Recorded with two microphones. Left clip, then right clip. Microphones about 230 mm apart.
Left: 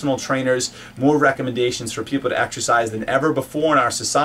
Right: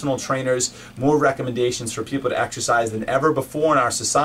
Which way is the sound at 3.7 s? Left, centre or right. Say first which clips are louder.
Left 2 dB; centre.